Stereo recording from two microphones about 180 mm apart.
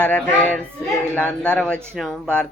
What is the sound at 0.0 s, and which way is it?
A man's voice, 5° left (ahead or behind).